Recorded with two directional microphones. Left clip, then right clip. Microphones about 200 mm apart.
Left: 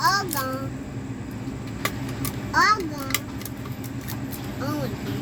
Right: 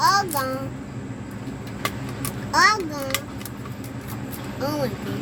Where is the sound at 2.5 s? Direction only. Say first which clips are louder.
Right 2 dB; 50° right (ahead or behind).